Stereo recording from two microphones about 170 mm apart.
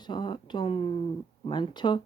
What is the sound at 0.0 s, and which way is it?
Speech, 25° left (ahead or behind).